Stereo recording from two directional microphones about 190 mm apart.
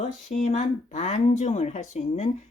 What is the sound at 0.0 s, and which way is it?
Speech, 40° left (ahead or behind).